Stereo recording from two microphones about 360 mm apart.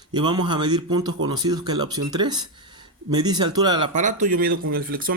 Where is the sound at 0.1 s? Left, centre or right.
Centre.